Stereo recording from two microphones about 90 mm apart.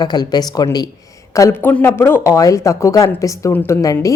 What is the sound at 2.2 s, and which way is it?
A woman's voice, 35° left (ahead or behind).